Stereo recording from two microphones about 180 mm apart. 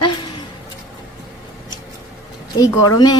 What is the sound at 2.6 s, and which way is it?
Speech, 20° left (ahead or behind).